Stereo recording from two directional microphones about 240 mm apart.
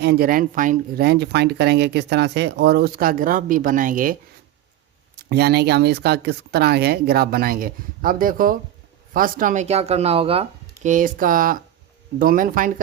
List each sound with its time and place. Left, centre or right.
0.0 s speech: right
5.3 s speech: right
10.8 s speech: right